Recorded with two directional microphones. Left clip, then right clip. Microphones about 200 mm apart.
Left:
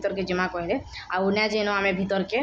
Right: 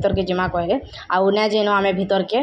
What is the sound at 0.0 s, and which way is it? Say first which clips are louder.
Speech: right 6 dB; 20° right (ahead or behind).